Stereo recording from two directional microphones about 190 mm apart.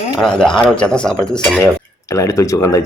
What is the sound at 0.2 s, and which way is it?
A woman's voice, 5° left (ahead or behind).